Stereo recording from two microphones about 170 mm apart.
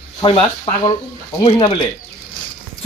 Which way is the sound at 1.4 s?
30° left (ahead or behind).